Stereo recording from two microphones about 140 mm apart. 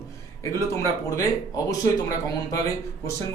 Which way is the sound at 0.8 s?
25° left (ahead or behind).